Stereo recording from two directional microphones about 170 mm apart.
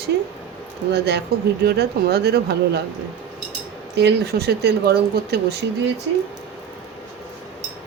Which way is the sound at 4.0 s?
70° right (ahead or behind).